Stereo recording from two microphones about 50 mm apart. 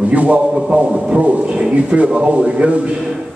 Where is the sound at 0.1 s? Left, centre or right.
Right.